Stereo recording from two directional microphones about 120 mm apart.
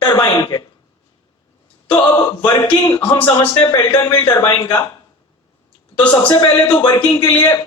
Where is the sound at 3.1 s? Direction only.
40° left (ahead or behind).